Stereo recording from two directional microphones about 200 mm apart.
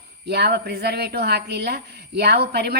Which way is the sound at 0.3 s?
55° right (ahead or behind).